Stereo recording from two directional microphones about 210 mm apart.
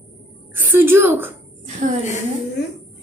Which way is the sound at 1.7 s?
35° right (ahead or behind).